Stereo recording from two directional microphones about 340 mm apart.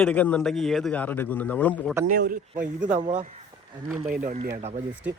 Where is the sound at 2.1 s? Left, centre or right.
Right.